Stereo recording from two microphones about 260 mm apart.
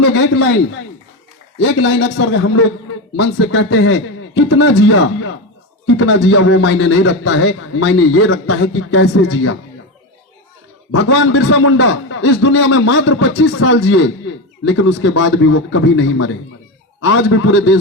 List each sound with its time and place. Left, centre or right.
0.0 s a man's voice: left
1.5 s a man's voice: left
10.9 s a man's voice: left